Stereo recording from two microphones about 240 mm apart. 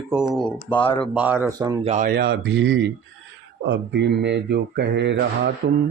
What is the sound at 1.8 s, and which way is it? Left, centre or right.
Speech, right.